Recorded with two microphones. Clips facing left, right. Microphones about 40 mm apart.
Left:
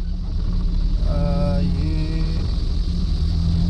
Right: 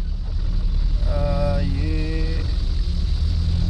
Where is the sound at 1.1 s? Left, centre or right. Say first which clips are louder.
Even; centre.